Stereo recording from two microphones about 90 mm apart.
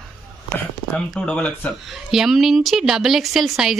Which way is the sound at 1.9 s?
5° right (ahead or behind).